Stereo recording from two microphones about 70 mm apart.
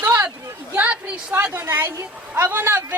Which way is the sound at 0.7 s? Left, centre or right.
Centre.